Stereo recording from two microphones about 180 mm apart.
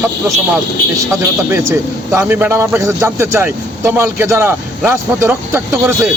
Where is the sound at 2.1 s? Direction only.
10° right (ahead or behind).